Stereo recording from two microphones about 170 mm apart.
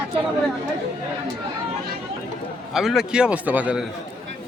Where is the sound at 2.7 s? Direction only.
Centre (ahead or behind).